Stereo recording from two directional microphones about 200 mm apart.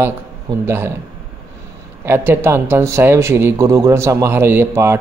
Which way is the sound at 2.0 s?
10° right (ahead or behind).